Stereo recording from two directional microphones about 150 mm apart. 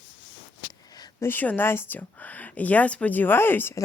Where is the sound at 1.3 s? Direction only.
15° left (ahead or behind).